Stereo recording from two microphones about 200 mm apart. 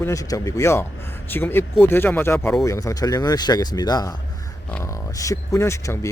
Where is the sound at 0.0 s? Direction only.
15° left (ahead or behind).